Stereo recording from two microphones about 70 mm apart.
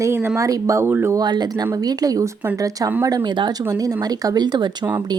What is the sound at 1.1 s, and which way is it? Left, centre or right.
Speech, right.